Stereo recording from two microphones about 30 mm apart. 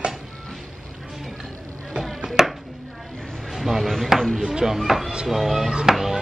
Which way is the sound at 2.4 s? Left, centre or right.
Centre.